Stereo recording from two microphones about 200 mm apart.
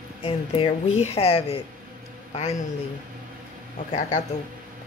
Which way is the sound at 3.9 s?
35° left (ahead or behind).